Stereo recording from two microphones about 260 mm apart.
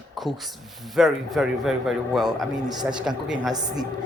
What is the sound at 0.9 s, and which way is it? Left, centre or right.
Speech, centre.